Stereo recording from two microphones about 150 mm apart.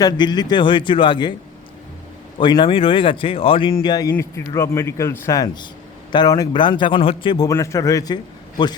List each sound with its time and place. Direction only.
0.0 s speech: 30° left (ahead or behind)
2.4 s speech: 30° left (ahead or behind)
4.1 s a man's voice: 20° left (ahead or behind)